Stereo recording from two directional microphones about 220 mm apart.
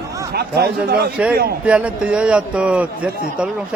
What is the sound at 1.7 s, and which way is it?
A man's voice, 5° right (ahead or behind).